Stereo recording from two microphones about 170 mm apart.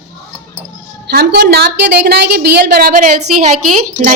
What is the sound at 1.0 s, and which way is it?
A woman's voice, 70° right (ahead or behind).